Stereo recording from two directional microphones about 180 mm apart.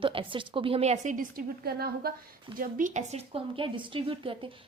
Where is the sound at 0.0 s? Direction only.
30° right (ahead or behind); by 2.1 s 60° right (ahead or behind).